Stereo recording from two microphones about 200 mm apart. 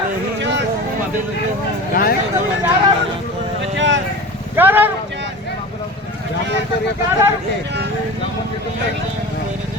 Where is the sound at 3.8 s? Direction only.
65° right (ahead or behind).